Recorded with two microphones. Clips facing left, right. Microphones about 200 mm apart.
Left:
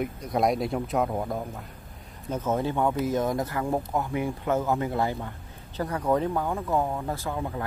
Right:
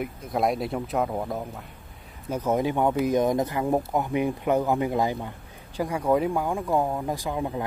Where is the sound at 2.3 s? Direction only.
15° right (ahead or behind).